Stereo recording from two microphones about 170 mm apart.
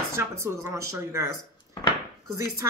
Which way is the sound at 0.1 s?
15° right (ahead or behind).